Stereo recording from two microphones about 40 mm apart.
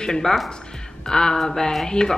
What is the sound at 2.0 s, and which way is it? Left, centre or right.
Speech, left.